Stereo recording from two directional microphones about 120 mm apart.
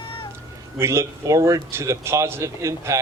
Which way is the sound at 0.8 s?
20° right (ahead or behind).